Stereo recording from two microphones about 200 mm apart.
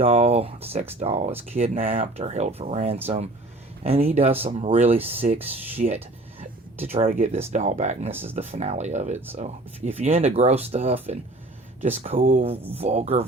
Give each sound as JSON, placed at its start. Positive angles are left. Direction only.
{"t": 0.0, "sound": "speech", "side_deg": -35}